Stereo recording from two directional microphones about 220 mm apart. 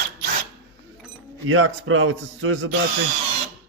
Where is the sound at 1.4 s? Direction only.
65° right (ahead or behind).